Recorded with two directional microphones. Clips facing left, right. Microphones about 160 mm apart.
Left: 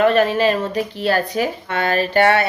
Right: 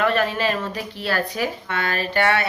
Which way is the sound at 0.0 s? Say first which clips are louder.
Left 6 dB; 30° left (ahead or behind).